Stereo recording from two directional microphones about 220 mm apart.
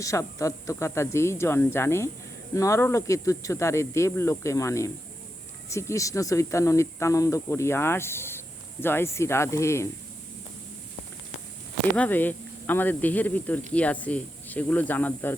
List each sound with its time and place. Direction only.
0.0 s speech: 15° left (ahead or behind)
11.9 s speech: 10° left (ahead or behind)